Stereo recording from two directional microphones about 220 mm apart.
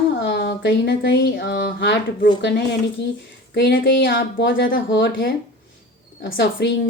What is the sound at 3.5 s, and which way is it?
A woman's voice, 45° left (ahead or behind).